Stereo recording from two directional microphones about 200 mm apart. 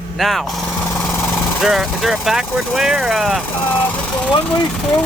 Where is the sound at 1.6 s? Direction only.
Centre (ahead or behind).